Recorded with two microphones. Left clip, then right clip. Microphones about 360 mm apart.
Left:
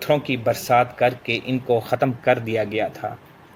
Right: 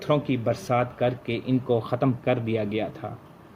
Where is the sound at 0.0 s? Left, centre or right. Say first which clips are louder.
Left 4 dB; left.